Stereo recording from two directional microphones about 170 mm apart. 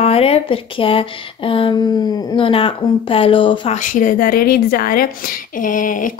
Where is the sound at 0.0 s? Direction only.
35° left (ahead or behind).